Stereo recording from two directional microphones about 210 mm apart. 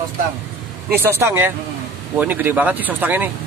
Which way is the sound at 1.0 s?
10° right (ahead or behind).